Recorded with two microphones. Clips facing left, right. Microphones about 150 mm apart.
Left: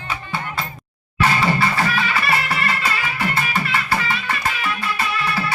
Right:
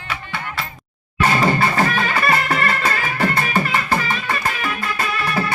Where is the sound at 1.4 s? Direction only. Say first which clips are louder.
Right 2 dB; 45° right (ahead or behind).